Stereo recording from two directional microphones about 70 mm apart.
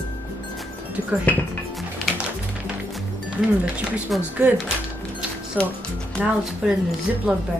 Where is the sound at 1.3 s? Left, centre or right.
Left.